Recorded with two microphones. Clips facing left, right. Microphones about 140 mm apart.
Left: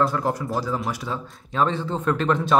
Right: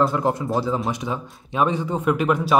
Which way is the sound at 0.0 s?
20° right (ahead or behind).